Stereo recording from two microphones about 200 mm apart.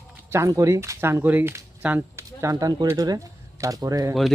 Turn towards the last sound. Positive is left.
turn(degrees=-15)  # may be behind; listen again after turning